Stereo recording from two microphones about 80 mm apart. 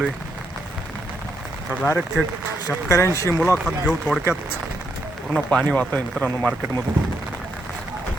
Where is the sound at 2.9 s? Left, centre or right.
Left.